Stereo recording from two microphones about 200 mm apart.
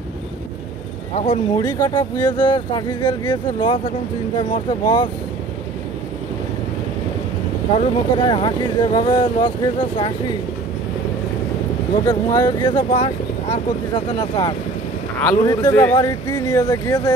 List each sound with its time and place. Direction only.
1.1 s speech: 30° left (ahead or behind)
7.7 s speech: 25° left (ahead or behind)
12.0 s speech: 20° left (ahead or behind)